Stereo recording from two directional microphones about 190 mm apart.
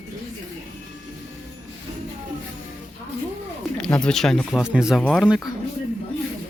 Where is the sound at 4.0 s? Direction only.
5° left (ahead or behind).